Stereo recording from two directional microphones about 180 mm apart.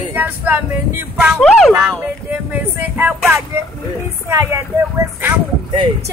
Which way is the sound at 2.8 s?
10° right (ahead or behind).